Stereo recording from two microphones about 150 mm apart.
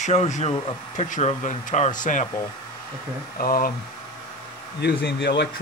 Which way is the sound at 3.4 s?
70° left (ahead or behind).